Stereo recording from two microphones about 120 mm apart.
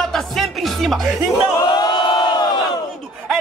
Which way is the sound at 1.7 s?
35° left (ahead or behind).